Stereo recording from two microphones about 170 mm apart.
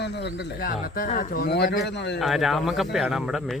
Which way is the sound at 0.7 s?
55° left (ahead or behind).